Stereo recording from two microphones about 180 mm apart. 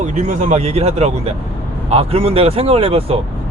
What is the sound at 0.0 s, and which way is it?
Speech, 40° right (ahead or behind).